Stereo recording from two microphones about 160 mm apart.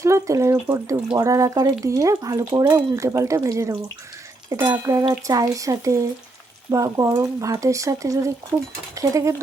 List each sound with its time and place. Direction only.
0.0 s speech: 20° right (ahead or behind)